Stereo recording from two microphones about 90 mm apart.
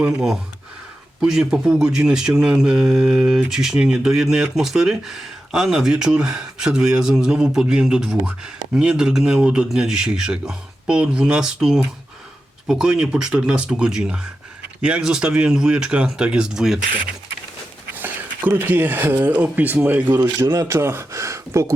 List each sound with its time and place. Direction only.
0.1 s speech: 5° right (ahead or behind)
17.9 s speech: 20° right (ahead or behind)
20.4 s speech: 40° right (ahead or behind)